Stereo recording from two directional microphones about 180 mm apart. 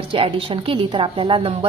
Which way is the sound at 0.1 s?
30° right (ahead or behind).